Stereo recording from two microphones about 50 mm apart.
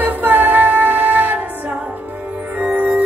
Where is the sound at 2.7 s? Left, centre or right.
Right.